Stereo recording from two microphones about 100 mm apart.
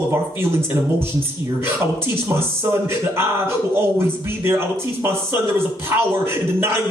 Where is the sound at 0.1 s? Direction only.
25° right (ahead or behind).